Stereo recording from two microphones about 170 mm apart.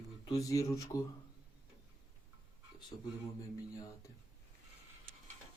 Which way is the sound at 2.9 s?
25° left (ahead or behind).